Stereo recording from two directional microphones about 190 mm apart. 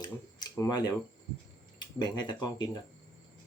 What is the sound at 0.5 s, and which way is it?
Speech, 20° left (ahead or behind).